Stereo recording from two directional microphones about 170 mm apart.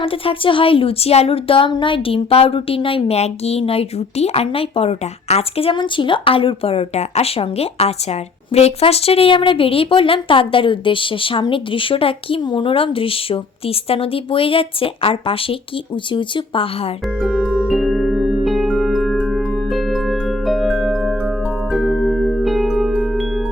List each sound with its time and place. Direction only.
0.0 s speech: 35° left (ahead or behind)
17.2 s music: centre (ahead or behind)